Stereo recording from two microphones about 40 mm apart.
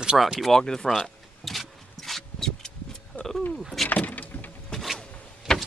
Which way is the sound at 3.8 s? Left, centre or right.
Left.